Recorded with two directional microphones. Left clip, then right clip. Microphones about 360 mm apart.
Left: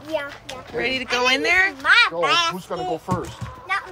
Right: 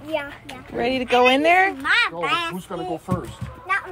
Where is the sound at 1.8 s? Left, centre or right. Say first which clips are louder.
Left 4 dB; centre.